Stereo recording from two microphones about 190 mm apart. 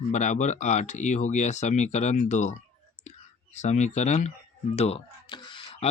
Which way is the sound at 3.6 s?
35° left (ahead or behind).